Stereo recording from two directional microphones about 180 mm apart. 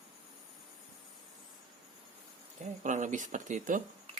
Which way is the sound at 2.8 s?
45° right (ahead or behind).